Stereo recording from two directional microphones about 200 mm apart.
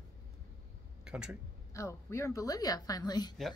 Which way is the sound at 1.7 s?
15° left (ahead or behind).